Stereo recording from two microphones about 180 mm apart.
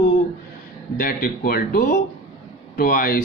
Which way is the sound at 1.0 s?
50° left (ahead or behind).